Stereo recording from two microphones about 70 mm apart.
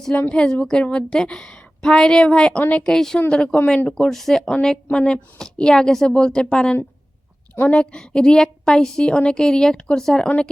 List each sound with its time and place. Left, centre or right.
0.3 s a woman's voice: centre
2.8 s a woman's voice: centre